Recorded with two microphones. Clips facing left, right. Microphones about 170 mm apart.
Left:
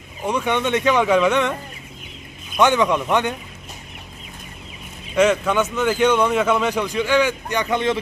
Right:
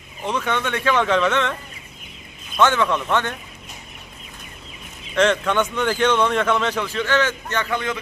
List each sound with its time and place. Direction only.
0.2 s a man's voice: 15° left (ahead or behind)
2.6 s a man's voice: 15° left (ahead or behind)
5.1 s a man's voice: 10° left (ahead or behind)